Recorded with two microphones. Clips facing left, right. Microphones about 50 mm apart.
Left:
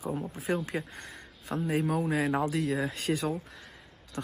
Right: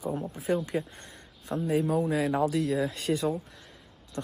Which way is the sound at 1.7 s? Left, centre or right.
Left.